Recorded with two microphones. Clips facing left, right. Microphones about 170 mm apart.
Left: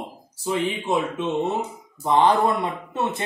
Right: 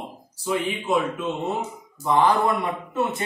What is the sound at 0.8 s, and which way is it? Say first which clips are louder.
Speech: even; 25° left (ahead or behind).